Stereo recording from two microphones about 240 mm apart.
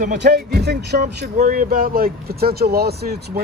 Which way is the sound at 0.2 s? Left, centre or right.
Right.